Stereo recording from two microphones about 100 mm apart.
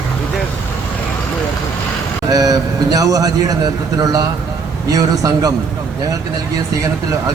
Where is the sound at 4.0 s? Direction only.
35° right (ahead or behind).